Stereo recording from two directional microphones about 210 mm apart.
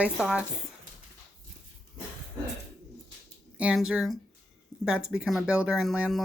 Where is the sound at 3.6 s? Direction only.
5° right (ahead or behind).